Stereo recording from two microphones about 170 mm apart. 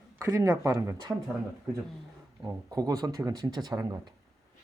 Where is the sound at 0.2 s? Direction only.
15° right (ahead or behind).